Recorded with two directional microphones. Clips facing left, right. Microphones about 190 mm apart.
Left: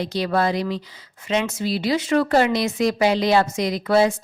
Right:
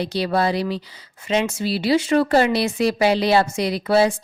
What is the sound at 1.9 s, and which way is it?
A woman's voice, 30° right (ahead or behind).